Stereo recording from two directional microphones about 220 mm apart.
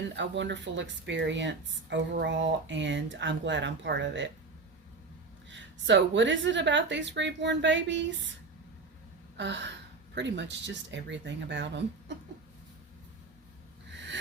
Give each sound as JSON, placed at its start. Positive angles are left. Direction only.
{"t": 0.2, "sound": "speech", "side_deg": -55}
{"t": 5.5, "sound": "speech", "side_deg": -55}
{"t": 9.4, "sound": "speech", "side_deg": -55}
{"t": 13.9, "sound": "snort", "side_deg": -55}